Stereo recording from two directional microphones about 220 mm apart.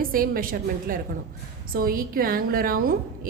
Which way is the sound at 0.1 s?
40° right (ahead or behind).